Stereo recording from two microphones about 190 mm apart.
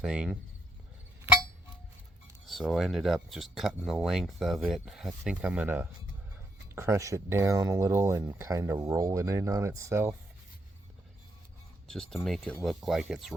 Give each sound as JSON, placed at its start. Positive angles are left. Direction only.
{"t": 0.0, "sound": "speech", "side_deg": -5}
{"t": 2.5, "sound": "speech", "side_deg": 0}
{"t": 11.9, "sound": "speech", "side_deg": 0}